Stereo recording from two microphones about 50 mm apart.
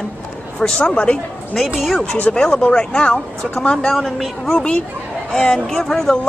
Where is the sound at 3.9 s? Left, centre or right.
Centre.